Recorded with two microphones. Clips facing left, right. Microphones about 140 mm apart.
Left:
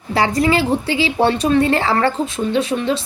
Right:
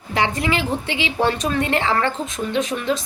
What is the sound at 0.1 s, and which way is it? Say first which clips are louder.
A woman's voice: left 5 dB; 35° left (ahead or behind).